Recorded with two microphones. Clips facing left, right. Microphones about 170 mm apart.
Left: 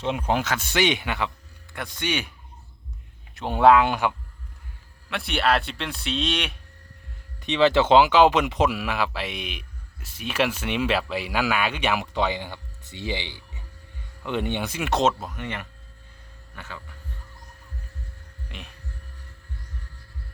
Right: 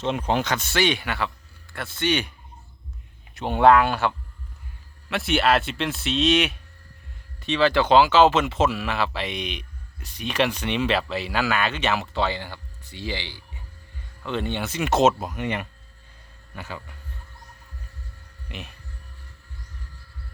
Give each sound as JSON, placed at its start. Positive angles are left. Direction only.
{"t": 0.0, "sound": "speech", "side_deg": 10}
{"t": 3.3, "sound": "speech", "side_deg": 0}
{"t": 3.8, "sound": "speech", "side_deg": 15}
{"t": 5.0, "sound": "speech", "side_deg": 0}
{"t": 7.4, "sound": "speech", "side_deg": 20}
{"t": 14.8, "sound": "speech", "side_deg": -5}
{"t": 15.3, "sound": "speech", "side_deg": -15}
{"t": 18.5, "sound": "speech", "side_deg": -5}